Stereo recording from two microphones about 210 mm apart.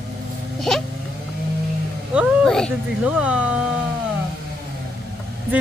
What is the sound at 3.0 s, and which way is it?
Speech, 5° right (ahead or behind).